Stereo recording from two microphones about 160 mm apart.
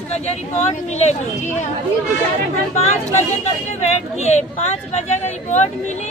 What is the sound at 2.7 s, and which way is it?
Speech, 40° left (ahead or behind).